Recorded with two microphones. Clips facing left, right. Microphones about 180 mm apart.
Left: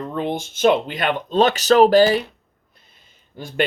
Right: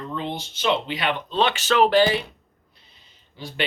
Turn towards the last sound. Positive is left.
turn(degrees=50)  # may be behind; listen again after turning